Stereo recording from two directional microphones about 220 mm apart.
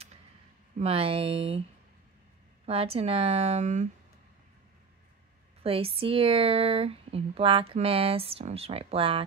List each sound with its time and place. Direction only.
0.7 s speech: 25° right (ahead or behind)
2.6 s speech: 25° right (ahead or behind)
5.6 s speech: 25° right (ahead or behind)